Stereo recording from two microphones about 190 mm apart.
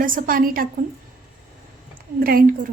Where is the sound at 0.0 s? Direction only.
45° right (ahead or behind).